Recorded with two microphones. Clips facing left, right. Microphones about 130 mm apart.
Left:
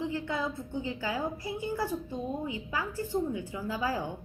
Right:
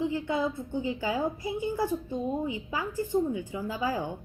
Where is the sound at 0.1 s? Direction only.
20° right (ahead or behind).